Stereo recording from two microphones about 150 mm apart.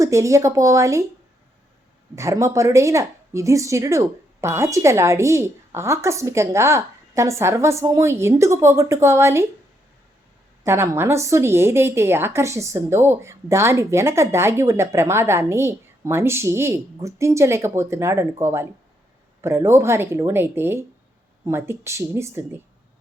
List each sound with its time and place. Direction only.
0.0 s a woman's voice: 20° right (ahead or behind)
2.1 s a woman's voice: 20° right (ahead or behind)
10.6 s a woman's voice: 20° right (ahead or behind)